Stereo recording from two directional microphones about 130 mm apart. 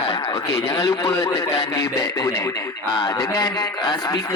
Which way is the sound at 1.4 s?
45° left (ahead or behind).